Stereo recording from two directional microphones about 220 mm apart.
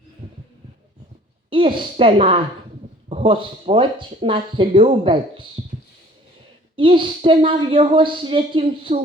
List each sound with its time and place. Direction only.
1.5 s speech: 25° right (ahead or behind)
6.7 s speech: 20° right (ahead or behind)